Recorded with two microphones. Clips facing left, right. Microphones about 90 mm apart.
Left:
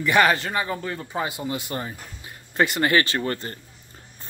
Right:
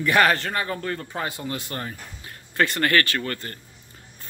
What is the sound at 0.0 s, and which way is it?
A man's voice, 5° left (ahead or behind).